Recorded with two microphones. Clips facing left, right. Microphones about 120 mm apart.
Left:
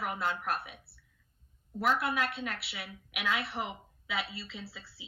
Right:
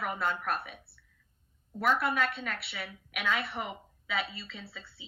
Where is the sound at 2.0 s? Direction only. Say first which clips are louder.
Right 2 dB; centre (ahead or behind).